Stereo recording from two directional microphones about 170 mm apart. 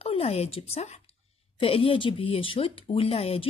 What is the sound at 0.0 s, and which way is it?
Speech, 35° left (ahead or behind).